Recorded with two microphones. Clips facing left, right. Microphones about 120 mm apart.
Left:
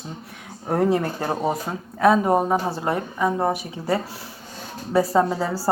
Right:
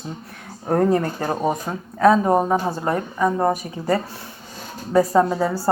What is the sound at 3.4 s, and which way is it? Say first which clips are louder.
A woman's voice: right 3 dB; 5° left (ahead or behind).